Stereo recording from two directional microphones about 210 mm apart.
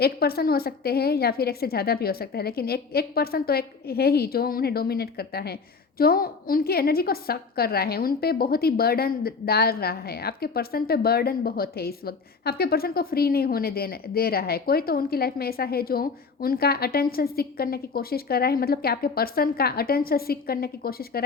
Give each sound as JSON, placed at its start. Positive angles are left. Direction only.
{"t": 0.0, "sound": "a woman's voice", "side_deg": 45}